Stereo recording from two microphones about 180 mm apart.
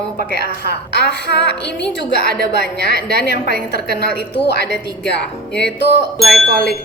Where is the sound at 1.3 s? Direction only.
70° left (ahead or behind).